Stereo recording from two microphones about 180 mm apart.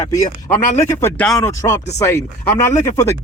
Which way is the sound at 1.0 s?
5° left (ahead or behind).